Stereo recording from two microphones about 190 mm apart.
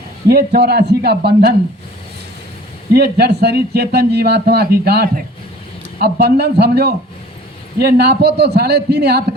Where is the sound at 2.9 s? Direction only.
60° right (ahead or behind).